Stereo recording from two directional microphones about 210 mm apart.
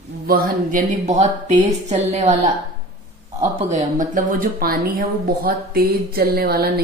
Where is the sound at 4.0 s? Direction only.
40° right (ahead or behind).